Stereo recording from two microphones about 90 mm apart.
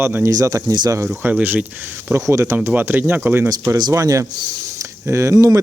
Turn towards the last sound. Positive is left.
turn(degrees=-35)  # may be behind; listen again after turning